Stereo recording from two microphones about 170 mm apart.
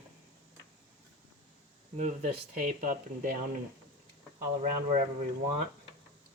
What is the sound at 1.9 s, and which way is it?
Speech, 45° right (ahead or behind).